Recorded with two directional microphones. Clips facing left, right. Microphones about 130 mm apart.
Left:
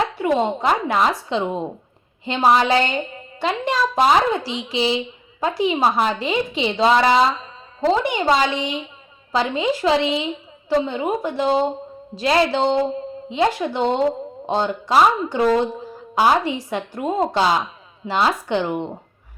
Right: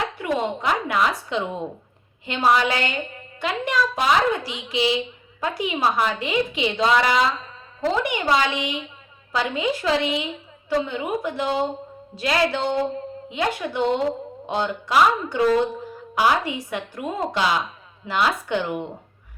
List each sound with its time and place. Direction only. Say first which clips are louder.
0.2 s a woman's voice: left 5 dB; 30° left (ahead or behind)